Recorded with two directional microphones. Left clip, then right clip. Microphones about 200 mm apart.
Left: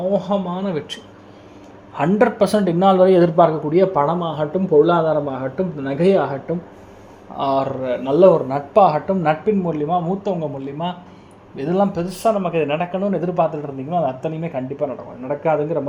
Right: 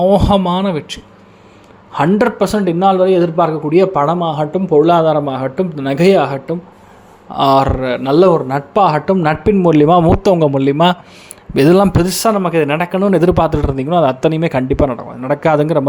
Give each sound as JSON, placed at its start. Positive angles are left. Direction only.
{"t": 0.1, "sound": "speech", "side_deg": -35}
{"t": 0.7, "sound": "a man's voice", "side_deg": -15}
{"t": 2.0, "sound": "a man's voice", "side_deg": -15}
{"t": 7.3, "sound": "speech", "side_deg": -30}